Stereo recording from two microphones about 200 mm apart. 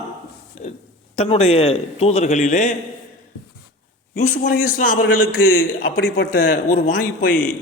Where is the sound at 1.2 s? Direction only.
30° left (ahead or behind).